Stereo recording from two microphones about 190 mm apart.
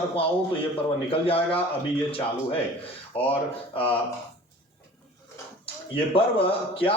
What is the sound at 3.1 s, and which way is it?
Speech, 30° left (ahead or behind).